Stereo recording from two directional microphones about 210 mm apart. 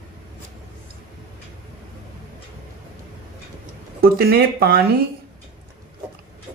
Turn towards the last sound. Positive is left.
turn(degrees=-50)  # may be behind; listen again after turning